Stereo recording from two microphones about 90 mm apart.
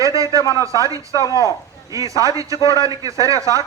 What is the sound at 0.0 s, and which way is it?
Speech, 40° right (ahead or behind).